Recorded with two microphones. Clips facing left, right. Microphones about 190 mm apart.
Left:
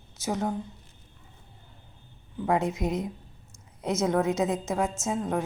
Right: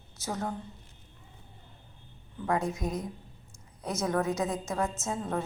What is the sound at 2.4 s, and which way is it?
A woman's voice, 20° left (ahead or behind).